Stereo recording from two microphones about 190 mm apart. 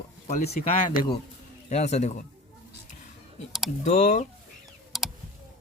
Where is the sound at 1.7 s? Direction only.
35° left (ahead or behind).